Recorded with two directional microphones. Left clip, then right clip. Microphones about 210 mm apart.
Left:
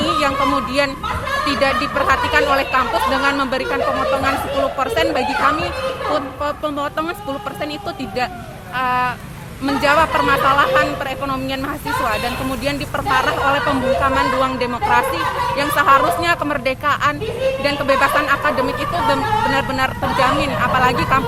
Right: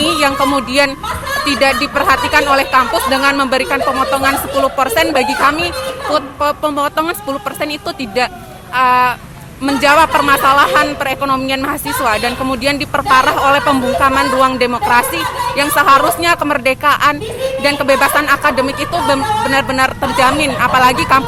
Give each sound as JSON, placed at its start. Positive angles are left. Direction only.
{"t": 0.0, "sound": "a sound", "side_deg": -30}
{"t": 0.5, "sound": "a man's voice", "side_deg": -30}
{"t": 8.7, "sound": "a man's voice", "side_deg": -30}